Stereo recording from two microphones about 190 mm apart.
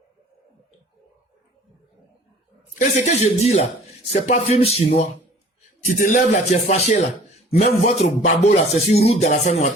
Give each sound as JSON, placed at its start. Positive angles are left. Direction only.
{"t": 2.7, "sound": "speech", "side_deg": 40}
{"t": 5.8, "sound": "speech", "side_deg": 45}